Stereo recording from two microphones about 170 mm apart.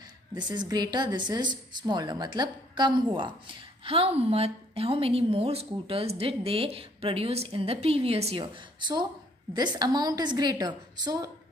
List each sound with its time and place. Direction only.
0.3 s a woman's voice: 25° right (ahead or behind)